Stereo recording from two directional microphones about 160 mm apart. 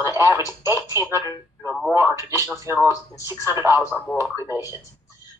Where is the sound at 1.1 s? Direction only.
20° left (ahead or behind).